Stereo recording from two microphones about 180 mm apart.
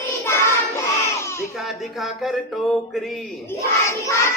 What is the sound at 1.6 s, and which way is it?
Music, centre (ahead or behind).